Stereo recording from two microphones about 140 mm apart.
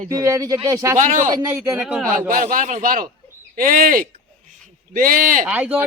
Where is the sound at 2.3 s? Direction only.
80° right.